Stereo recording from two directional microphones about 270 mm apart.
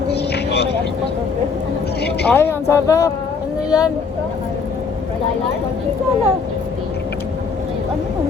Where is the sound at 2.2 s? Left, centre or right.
Centre.